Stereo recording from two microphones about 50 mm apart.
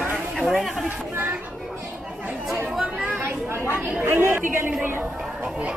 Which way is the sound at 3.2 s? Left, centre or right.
Right.